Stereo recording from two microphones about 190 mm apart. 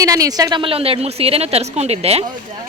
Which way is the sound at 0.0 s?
20° right (ahead or behind).